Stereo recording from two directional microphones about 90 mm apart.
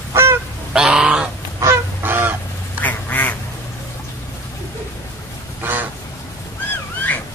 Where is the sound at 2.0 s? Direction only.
20° right (ahead or behind).